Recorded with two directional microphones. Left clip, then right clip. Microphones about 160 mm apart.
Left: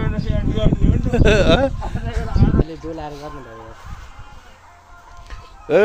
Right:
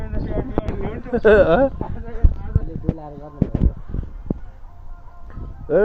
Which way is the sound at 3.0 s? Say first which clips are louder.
Left 6 dB; 45° left (ahead or behind).